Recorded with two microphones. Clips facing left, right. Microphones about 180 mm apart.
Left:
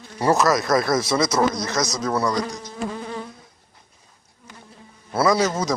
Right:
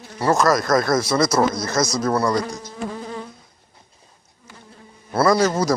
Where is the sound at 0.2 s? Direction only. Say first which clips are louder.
Right 1 dB; 15° left (ahead or behind).